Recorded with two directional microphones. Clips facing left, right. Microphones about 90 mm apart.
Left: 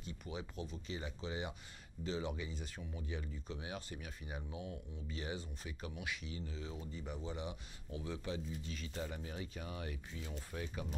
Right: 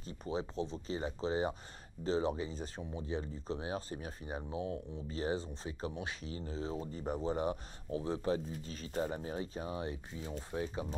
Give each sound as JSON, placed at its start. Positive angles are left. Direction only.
{"t": 0.0, "sound": "speech", "side_deg": -35}